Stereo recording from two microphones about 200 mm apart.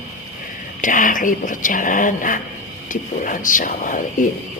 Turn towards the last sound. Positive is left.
turn(degrees=40)  # may be behind; listen again after turning